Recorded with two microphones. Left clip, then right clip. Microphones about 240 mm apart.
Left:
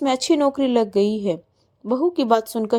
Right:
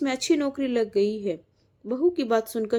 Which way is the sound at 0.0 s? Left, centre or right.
Left.